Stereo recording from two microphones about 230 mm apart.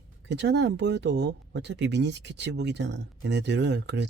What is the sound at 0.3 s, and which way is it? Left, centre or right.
Speech, right.